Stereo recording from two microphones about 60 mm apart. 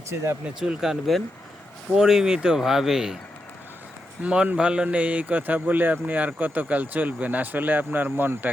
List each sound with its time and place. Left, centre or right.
0.4 s speech: centre
0.8 s speech: centre
4.2 s a man's voice: centre; by 8.4 s right